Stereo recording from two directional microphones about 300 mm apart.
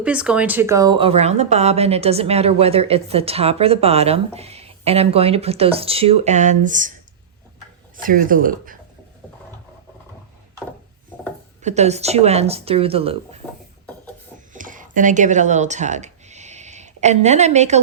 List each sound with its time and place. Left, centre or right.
0.0 s speech: centre; by 7.0 s right
8.0 s speech: right
11.6 s speech: right
14.5 s a sound: right